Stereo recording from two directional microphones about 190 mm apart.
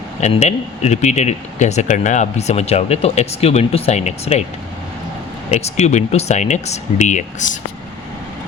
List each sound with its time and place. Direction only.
0.2 s speech: 35° left (ahead or behind)
5.5 s speech: 35° left (ahead or behind)